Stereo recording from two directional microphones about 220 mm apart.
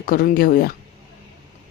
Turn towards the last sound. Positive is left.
turn(degrees=40)  # may be behind; listen again after turning